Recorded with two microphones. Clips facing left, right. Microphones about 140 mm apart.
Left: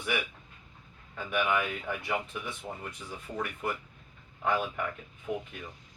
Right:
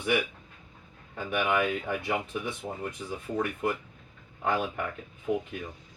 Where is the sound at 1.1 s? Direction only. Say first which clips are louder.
Right 2 dB; 30° right (ahead or behind).